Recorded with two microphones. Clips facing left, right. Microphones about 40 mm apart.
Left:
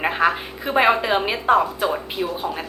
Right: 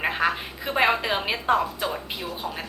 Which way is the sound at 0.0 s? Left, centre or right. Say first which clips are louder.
Left 4 dB; centre.